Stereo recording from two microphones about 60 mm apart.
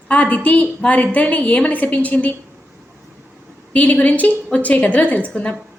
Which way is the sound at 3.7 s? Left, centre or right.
Left.